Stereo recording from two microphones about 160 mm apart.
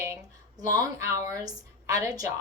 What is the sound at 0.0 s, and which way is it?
A woman's voice, 20° right (ahead or behind).